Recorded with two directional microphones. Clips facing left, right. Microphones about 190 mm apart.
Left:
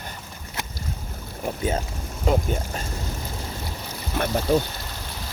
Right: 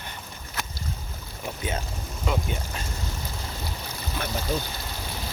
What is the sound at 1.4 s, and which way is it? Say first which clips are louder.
Boat: left 6 dB; 40° left (ahead or behind).